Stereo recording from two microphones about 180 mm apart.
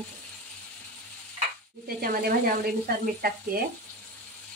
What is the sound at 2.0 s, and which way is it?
Speech, 55° right (ahead or behind).